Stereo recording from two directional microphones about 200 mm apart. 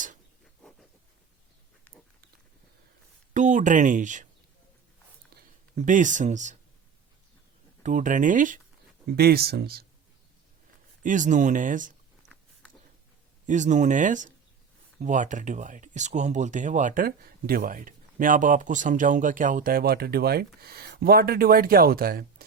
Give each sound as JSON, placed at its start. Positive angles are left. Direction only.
{"t": 3.3, "sound": "speech", "side_deg": -40}
{"t": 5.8, "sound": "speech", "side_deg": -40}
{"t": 7.9, "sound": "speech", "side_deg": -40}
{"t": 9.0, "sound": "speech", "side_deg": -50}
{"t": 11.0, "sound": "speech", "side_deg": -40}
{"t": 13.5, "sound": "speech", "side_deg": -40}